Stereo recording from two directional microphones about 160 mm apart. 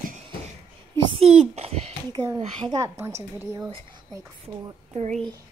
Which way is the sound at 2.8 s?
15° right (ahead or behind).